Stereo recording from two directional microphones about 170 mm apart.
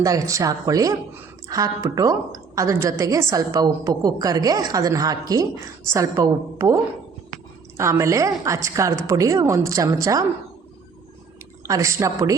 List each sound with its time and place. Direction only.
0.0 s a woman's voice: 20° right (ahead or behind)
7.8 s a woman's voice: 15° right (ahead or behind)
11.6 s a woman's voice: 20° right (ahead or behind)